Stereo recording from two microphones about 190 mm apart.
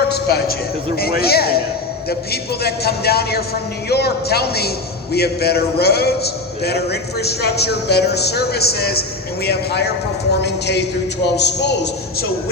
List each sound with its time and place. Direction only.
0.1 s a man's voice: 55° left (ahead or behind)